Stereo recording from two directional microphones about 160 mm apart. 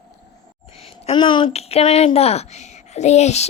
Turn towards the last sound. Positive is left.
turn(degrees=45)  # may be behind; listen again after turning